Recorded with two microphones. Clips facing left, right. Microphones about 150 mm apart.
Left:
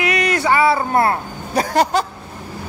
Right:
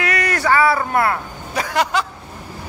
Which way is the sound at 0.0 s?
20° left (ahead or behind).